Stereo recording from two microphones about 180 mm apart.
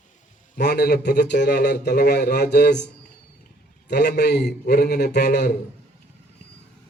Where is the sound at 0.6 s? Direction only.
65° left (ahead or behind).